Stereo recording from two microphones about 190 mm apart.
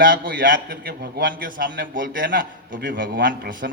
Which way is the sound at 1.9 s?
45° right (ahead or behind).